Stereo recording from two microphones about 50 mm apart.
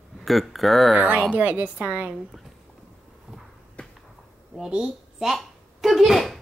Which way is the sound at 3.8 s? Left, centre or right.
Left.